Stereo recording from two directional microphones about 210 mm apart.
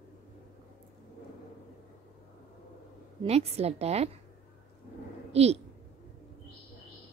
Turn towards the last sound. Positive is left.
turn(degrees=-30)  # may be behind; listen again after turning